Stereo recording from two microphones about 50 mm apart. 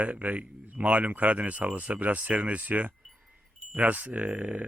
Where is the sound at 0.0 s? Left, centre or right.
Right.